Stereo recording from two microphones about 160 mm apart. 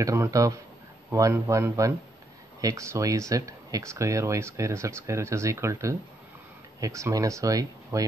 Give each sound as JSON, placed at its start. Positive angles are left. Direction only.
{"t": 0.0, "sound": "speech", "side_deg": -20}